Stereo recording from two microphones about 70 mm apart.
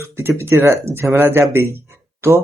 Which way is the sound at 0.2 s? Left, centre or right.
Right.